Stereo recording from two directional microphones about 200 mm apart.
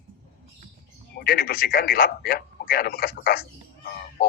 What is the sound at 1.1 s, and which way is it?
A man's voice, 45° left (ahead or behind).